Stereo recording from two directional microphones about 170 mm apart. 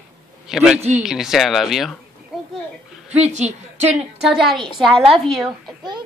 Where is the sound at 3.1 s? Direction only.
40° right (ahead or behind).